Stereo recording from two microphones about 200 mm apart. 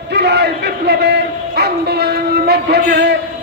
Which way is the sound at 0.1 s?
55° right (ahead or behind).